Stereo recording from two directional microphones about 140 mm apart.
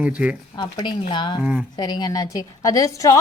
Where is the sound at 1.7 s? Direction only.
30° left (ahead or behind).